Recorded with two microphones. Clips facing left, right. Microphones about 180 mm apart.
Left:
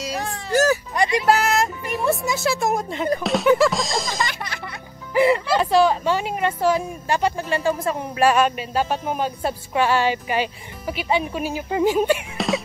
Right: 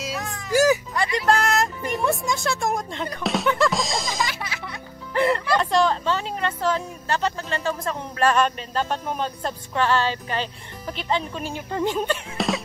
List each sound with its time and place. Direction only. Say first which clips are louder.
0.5 s music: even; 10° right (ahead or behind)
0.9 s music: left 4 dB; 20° left (ahead or behind)
1.2 s speech: right 1 dB; 5° left (ahead or behind)